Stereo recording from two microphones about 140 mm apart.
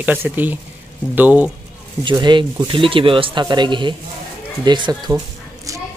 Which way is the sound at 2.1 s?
35° right (ahead or behind).